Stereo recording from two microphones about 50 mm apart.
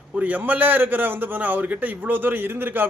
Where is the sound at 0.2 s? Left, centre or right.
Right.